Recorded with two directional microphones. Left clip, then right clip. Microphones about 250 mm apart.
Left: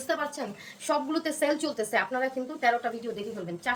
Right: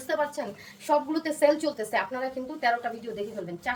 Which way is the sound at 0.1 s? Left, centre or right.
Centre.